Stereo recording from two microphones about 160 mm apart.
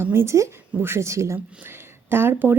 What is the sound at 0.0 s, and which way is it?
Speech, 15° right (ahead or behind).